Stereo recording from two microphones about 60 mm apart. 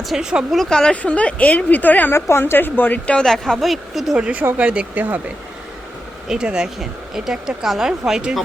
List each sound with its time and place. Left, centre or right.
0.0 s speech: centre
0.5 s speech: centre; by 2.1 s left
2.1 s a woman's voice: left
3.2 s a woman's voice: centre
4.2 s speech: right
6.2 s speech: centre